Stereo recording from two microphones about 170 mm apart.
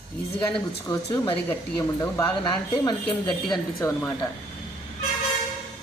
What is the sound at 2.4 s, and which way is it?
Speech, 25° left (ahead or behind).